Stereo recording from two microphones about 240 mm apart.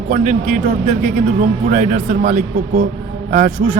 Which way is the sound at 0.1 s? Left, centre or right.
Right.